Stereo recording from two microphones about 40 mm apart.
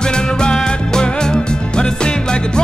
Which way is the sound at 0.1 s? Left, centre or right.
Left.